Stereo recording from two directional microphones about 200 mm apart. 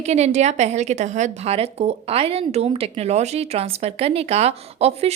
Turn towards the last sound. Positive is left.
turn(degrees=-30)  # may be behind; listen again after turning